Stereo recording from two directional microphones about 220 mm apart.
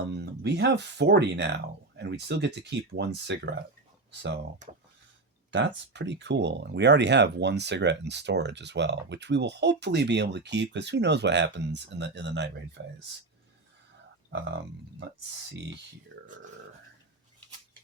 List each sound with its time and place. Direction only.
0.0 s speech: 50° right (ahead or behind)
5.5 s speech: 55° right (ahead or behind)
14.3 s speech: 55° right (ahead or behind)
16.2 s speech: 35° right (ahead or behind)